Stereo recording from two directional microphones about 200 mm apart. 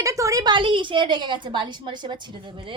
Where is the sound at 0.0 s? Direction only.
15° right (ahead or behind).